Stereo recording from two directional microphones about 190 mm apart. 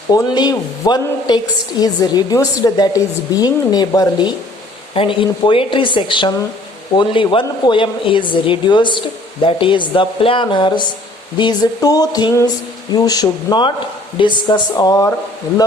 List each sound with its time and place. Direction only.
0.1 s a woman's voice: 20° left (ahead or behind)